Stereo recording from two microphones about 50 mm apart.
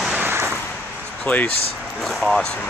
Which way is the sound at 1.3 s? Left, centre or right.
Left.